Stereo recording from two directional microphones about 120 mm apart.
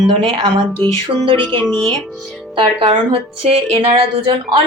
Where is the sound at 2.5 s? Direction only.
45° right (ahead or behind).